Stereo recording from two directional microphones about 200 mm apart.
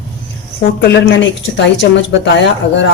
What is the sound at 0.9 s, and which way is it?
Speech, 70° left (ahead or behind).